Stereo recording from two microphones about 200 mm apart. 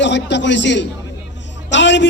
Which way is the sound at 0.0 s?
60° left (ahead or behind).